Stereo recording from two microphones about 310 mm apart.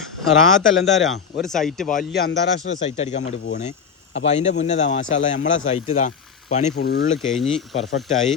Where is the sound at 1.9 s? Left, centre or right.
Left.